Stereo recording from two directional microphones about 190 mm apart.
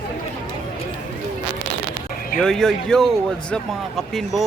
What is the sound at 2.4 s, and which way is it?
Speech, 5° left (ahead or behind).